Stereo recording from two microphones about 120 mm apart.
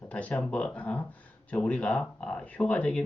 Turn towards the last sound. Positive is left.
turn(degrees=10)  # may be behind; listen again after turning